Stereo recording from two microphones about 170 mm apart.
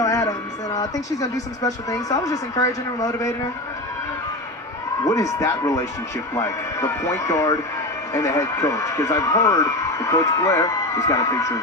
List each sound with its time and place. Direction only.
0.0 s speech: 20° left (ahead or behind)
5.0 s speech: 20° left (ahead or behind)